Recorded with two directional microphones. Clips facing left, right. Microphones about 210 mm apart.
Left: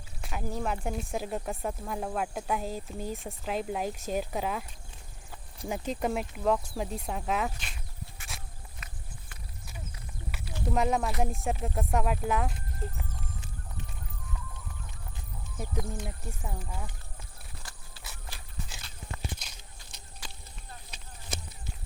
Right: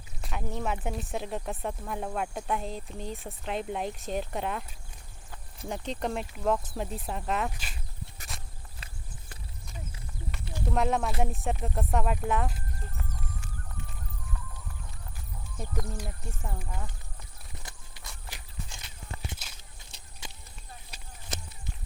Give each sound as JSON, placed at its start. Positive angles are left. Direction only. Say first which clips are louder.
{"t": 0.2, "sound": "speech", "louder": "left 1 dB", "side_deg": 5}
{"t": 8.3, "sound": "walk", "louder": "even", "side_deg": 0}
{"t": 8.8, "sound": "clip-clop", "louder": "even", "side_deg": -30}
{"t": 10.7, "sound": "speech", "louder": "even", "side_deg": 0}
{"t": 15.5, "sound": "speech", "louder": "left 1 dB", "side_deg": 5}
{"t": 17.6, "sound": "horse", "louder": "right 1 dB", "side_deg": -20}
{"t": 18.8, "sound": "walk", "louder": "left 1 dB", "side_deg": -25}
{"t": 20.2, "sound": "a sound", "louder": "right 1 dB", "side_deg": -25}